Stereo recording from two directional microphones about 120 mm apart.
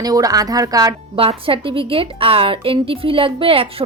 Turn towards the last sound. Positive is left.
turn(degrees=-50)  # may be behind; listen again after turning